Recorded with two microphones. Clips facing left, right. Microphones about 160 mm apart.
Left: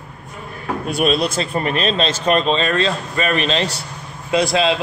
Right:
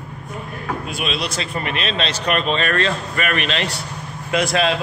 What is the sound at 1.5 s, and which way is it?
Speech, 35° left (ahead or behind).